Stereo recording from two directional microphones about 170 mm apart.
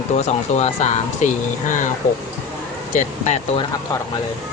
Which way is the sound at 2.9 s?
50° left (ahead or behind).